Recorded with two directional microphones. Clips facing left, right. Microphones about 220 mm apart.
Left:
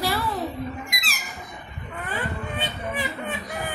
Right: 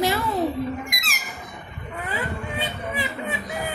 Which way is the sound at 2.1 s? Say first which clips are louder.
Even; 10° right (ahead or behind).